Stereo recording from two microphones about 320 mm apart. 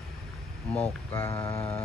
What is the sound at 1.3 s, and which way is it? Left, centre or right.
Speech, centre.